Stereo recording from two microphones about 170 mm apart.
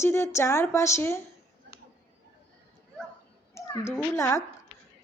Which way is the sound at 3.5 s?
15° left (ahead or behind).